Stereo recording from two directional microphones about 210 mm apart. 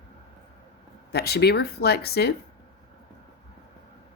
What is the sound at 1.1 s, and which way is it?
Speech, 50° left (ahead or behind).